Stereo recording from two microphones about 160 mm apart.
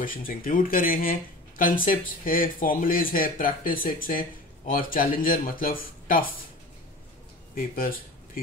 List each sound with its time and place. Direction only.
0.0 s speech: 60° left (ahead or behind)
7.5 s speech: 60° left (ahead or behind)